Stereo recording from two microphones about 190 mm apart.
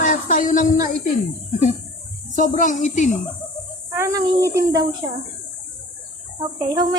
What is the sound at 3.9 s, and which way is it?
Speech, 15° right (ahead or behind).